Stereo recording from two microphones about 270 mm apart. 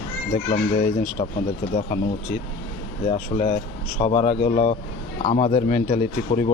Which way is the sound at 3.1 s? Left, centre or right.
Left.